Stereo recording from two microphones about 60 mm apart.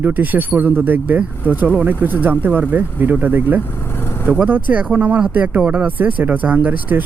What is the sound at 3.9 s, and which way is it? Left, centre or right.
Vehicle, left.